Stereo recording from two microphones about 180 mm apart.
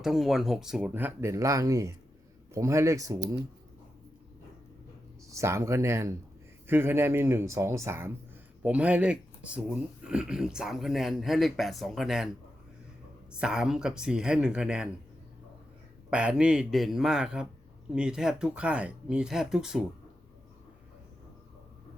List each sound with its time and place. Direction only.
0.0 s speech: centre (ahead or behind); by 3.2 s 20° right (ahead or behind)
5.3 s speech: 15° right (ahead or behind)
13.3 s speech: 5° right (ahead or behind)
16.0 s speech: 5° right (ahead or behind)